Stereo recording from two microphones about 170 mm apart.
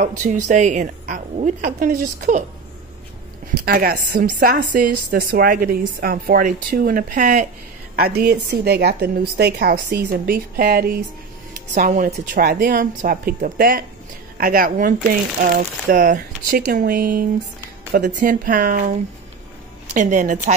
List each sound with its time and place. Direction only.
0.2 s a woman's voice: 45° right (ahead or behind)
3.6 s a woman's voice: 65° right (ahead or behind); by 7.4 s 50° right (ahead or behind)
7.9 s a woman's voice: 65° right (ahead or behind)
11.7 s a woman's voice: 50° right (ahead or behind)
19.9 s a woman's voice: 45° right (ahead or behind)